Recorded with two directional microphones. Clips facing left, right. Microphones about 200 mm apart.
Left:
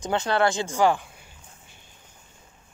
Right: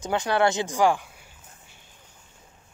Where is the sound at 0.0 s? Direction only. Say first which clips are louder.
Even; 10° right (ahead or behind).